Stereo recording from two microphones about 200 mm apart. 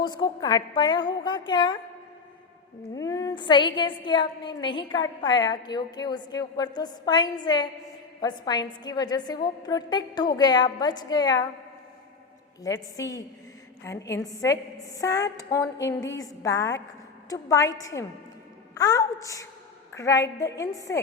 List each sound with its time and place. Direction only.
0.0 s a woman's voice: 20° left (ahead or behind)
2.9 s a woman's voice: 20° left (ahead or behind)
12.6 s a woman's voice: 15° left (ahead or behind)